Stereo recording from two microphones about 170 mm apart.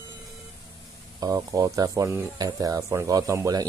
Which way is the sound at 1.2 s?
20° right (ahead or behind).